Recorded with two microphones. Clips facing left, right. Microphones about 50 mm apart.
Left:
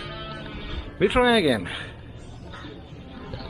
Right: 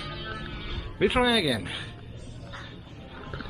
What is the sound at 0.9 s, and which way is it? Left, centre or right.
Speech, centre.